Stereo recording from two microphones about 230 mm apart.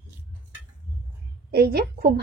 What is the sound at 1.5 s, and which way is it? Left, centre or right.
Speech, right.